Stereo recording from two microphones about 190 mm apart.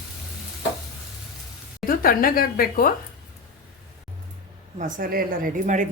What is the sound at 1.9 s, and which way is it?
A woman's voice, 50° left (ahead or behind).